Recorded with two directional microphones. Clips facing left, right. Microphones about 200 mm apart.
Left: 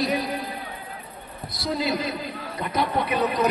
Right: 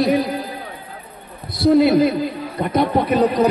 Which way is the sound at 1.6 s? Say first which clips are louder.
Right 13 dB; 60° right (ahead or behind).